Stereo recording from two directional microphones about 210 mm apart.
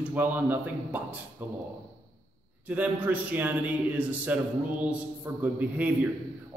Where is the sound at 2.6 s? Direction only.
5° right (ahead or behind).